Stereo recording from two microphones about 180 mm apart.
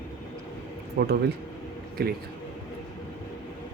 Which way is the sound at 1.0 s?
65° right (ahead or behind).